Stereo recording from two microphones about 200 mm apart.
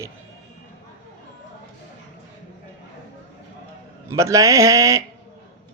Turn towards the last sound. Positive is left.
turn(degrees=-15)  # may be behind; listen again after turning